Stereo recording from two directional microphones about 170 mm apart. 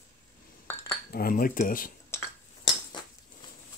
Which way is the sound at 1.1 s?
60° left (ahead or behind).